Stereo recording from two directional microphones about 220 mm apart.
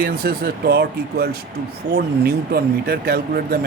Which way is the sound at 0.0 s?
45° right (ahead or behind).